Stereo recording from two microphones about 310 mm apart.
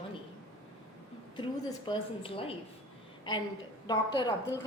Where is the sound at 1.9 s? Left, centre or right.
Centre.